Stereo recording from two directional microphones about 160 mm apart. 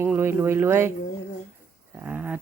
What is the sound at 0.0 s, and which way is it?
Speech, 15° right (ahead or behind).